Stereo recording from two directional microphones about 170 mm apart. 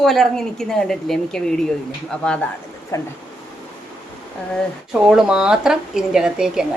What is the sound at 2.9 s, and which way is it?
Speech, 15° left (ahead or behind).